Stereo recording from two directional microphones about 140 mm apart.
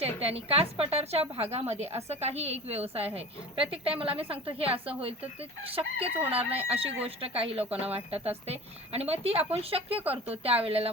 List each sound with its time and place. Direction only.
0.0 s a woman's voice: 45° right (ahead or behind)
6.1 s speech: 10° right (ahead or behind)
6.7 s a woman's voice: 45° right (ahead or behind)